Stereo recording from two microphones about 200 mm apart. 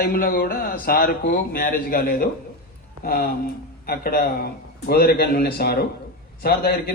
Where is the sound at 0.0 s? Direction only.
50° left (ahead or behind).